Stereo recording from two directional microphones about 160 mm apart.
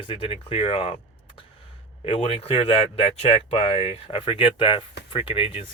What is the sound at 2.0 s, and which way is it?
Speech, 35° left (ahead or behind).